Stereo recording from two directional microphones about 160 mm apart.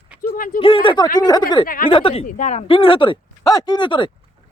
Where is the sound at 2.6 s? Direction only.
35° left (ahead or behind).